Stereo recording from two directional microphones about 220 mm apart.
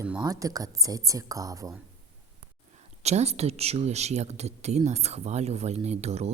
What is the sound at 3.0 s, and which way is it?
Speech, 30° right (ahead or behind).